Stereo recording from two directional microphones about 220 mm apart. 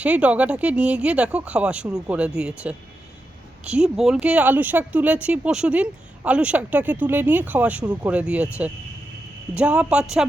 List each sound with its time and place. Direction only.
0.0 s speech: 5° right (ahead or behind)